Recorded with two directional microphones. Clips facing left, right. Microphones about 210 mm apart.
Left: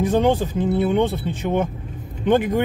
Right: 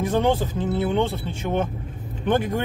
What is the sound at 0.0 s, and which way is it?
Speech, 15° left (ahead or behind).